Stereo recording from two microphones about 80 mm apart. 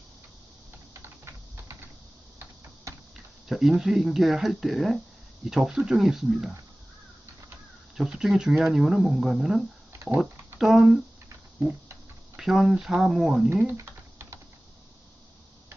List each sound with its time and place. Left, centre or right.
0.9 s typing: right
2.9 s a sound: right
3.5 s speech: centre
7.9 s speech: centre
9.9 s a sound: right
10.6 s speech: centre
12.4 s speech: centre
13.7 s typing: right